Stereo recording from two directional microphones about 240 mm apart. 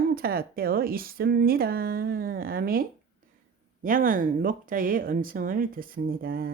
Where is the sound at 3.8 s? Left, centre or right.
Right.